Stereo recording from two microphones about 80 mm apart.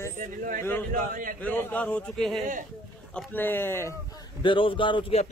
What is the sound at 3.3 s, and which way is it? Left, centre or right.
Speech, left.